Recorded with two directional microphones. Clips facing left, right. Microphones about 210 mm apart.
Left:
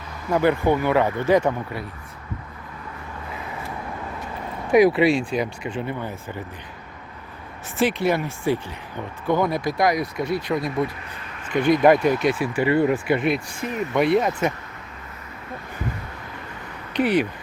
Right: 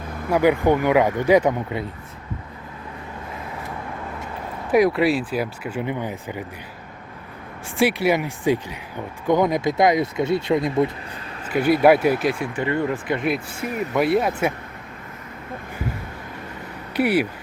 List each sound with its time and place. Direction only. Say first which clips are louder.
0.3 s speech: right 2 dB; 10° right (ahead or behind)
4.7 s speech: left 1 dB; centre (ahead or behind)
5.8 s speech: right 3 dB; 15° right (ahead or behind)
7.8 s speech: right 2 dB; 10° right (ahead or behind)
11.4 s speech: right 1 dB; 5° right (ahead or behind)
12.2 s speech: left 2 dB; 5° left (ahead or behind)
13.2 s speech: even; 5° right (ahead or behind)
16.9 s speech: even; 10° right (ahead or behind)